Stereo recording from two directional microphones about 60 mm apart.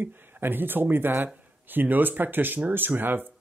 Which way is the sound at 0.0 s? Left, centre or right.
Right.